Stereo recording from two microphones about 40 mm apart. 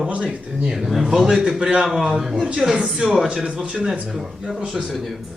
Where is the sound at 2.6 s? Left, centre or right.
Centre.